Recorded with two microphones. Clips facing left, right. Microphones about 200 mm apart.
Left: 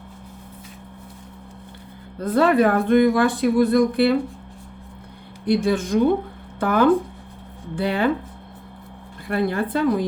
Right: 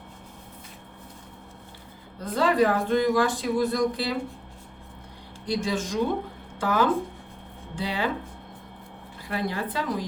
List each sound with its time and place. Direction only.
2.2 s speech: 60° left (ahead or behind)
5.5 s speech: 60° left (ahead or behind)
9.3 s speech: 55° left (ahead or behind)